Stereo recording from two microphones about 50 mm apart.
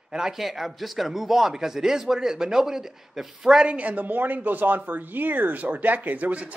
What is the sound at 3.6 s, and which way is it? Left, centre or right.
Speech, right.